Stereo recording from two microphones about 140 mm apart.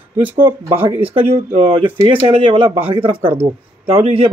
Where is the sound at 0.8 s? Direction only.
15° right (ahead or behind).